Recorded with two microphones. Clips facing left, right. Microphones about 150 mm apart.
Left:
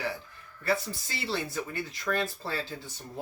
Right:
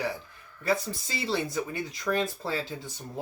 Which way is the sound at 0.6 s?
15° right (ahead or behind).